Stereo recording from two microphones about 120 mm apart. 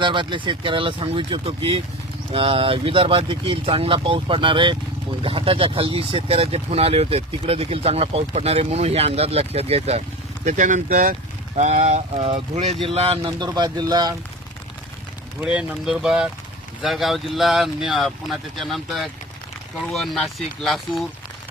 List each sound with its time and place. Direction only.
0.0 s speech: 40° right (ahead or behind); by 11.1 s 90° right
11.5 s speech: 80° right
12.2 s speech: 60° right (ahead or behind)
13.4 s speech: 35° right (ahead or behind)
15.4 s speech: 5° right (ahead or behind)